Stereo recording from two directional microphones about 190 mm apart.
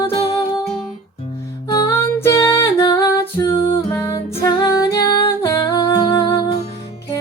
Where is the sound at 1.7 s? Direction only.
15° left (ahead or behind).